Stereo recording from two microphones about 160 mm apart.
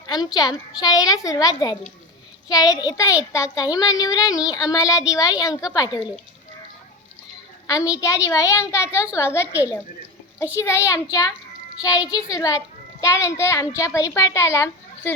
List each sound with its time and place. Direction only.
0.1 s a child's voice: 25° left (ahead or behind)
7.9 s a child's voice: 20° left (ahead or behind)